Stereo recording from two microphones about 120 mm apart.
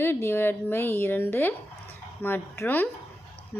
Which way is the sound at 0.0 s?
20° left (ahead or behind).